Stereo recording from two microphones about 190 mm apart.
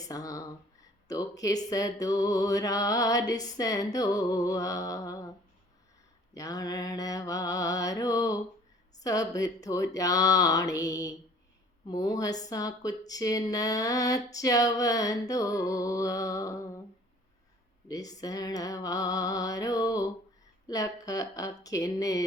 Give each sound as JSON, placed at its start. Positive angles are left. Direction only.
{"t": 0.1, "sound": "speech", "side_deg": 20}
{"t": 6.3, "sound": "speech", "side_deg": 20}
{"t": 17.8, "sound": "speech", "side_deg": 20}